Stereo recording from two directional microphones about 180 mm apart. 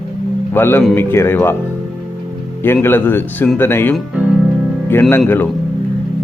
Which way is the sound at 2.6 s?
10° left (ahead or behind).